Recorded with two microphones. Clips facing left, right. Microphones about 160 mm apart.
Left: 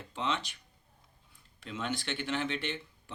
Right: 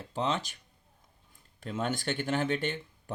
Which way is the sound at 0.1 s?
40° right (ahead or behind).